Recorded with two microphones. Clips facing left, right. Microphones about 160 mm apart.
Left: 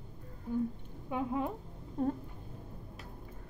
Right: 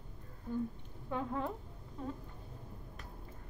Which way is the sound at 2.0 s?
50° left (ahead or behind).